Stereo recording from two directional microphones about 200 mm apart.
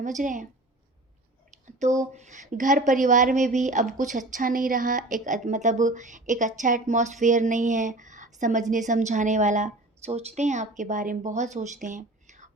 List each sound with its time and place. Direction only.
0.0 s speech: 40° right (ahead or behind)
1.6 s speech: 35° right (ahead or behind)